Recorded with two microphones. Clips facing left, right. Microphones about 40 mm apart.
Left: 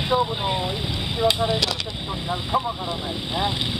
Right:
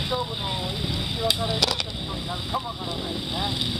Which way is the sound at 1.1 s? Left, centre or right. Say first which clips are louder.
Left 5 dB; centre.